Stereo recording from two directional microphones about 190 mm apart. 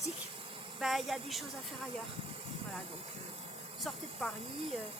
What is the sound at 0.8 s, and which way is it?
Speech, centre (ahead or behind).